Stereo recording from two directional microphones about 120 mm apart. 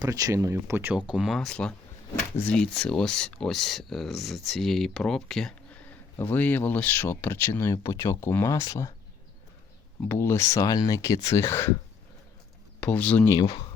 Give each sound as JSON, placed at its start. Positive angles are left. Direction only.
{"t": 0.0, "sound": "speech", "side_deg": -30}
{"t": 6.1, "sound": "speech", "side_deg": 15}
{"t": 10.1, "sound": "speech", "side_deg": 20}
{"t": 12.8, "sound": "speech", "side_deg": 10}
{"t": 13.2, "sound": "speech", "side_deg": 30}